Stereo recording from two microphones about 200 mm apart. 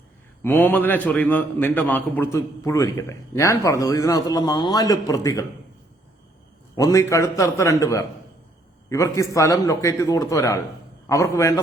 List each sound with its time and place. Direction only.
0.4 s a man's voice: 10° left (ahead or behind)
6.7 s a man's voice: 15° left (ahead or behind)